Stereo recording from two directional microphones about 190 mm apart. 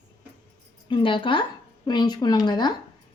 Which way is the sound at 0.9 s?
25° left (ahead or behind).